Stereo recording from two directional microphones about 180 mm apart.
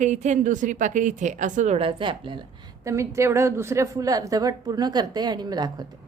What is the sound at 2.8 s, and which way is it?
A woman's voice, 15° right (ahead or behind).